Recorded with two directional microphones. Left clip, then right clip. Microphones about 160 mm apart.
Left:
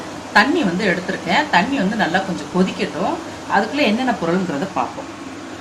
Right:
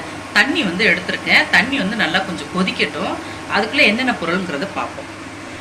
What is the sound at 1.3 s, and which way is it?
Speech, 45° left (ahead or behind).